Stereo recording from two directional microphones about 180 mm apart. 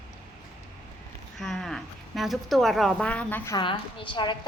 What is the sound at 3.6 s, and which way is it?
Speech, 25° left (ahead or behind).